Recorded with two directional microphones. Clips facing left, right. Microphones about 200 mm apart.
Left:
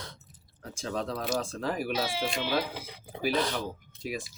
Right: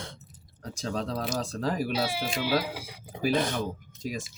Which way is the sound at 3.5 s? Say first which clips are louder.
Right 3 dB; 45° right (ahead or behind).